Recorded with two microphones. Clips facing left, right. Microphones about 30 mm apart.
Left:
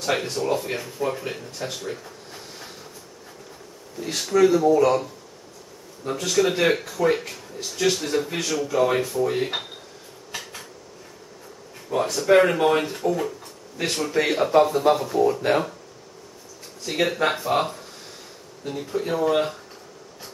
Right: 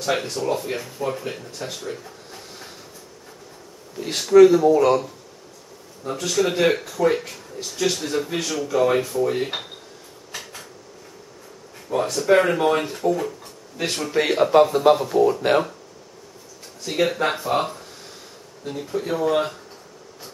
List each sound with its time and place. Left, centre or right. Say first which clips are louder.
0.0 s speech: right 1 dB; centre
1.8 s drawer open or close: even; centre
3.9 s speech: right 2 dB; right
4.2 s speech: right 6 dB; centre
6.0 s speech: even; centre
10.3 s dishes: left 1 dB; centre
11.9 s speech: even; centre
17.1 s speech: even; centre